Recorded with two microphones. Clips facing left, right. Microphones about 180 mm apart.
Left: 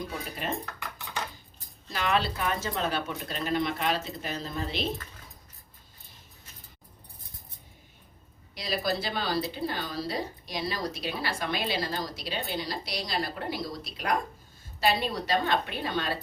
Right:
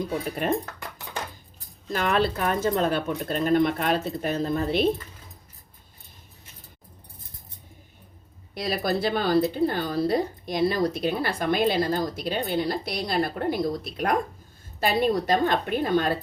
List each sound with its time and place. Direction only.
0.3 s speech: 50° right (ahead or behind)
1.9 s speech: 50° right (ahead or behind)
8.5 s speech: 55° right (ahead or behind)